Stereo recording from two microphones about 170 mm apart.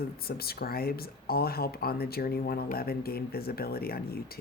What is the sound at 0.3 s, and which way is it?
Speech, 65° left (ahead or behind).